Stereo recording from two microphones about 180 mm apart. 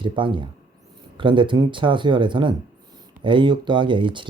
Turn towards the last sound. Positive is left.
turn(degrees=-25)  # may be behind; listen again after turning